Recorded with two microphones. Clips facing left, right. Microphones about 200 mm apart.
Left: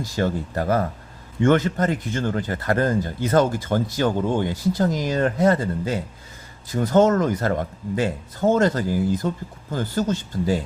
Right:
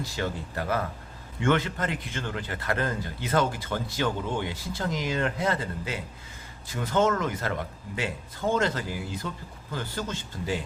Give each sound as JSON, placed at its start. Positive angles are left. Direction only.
{"t": 0.0, "sound": "a man's voice", "side_deg": 45}